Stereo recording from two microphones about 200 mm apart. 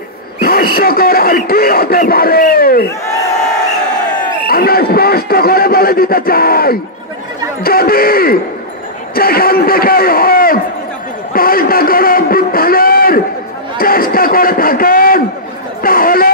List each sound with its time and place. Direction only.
0.4 s speech: 50° left (ahead or behind)
4.5 s a man's voice: 50° left (ahead or behind)
11.3 s a sound: 45° left (ahead or behind)
13.7 s a man's voice: 45° left (ahead or behind)